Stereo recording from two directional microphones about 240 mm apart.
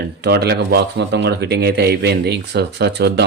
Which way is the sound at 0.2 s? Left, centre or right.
Right.